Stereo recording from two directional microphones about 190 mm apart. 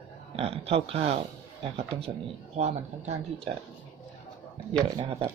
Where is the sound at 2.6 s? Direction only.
35° right (ahead or behind).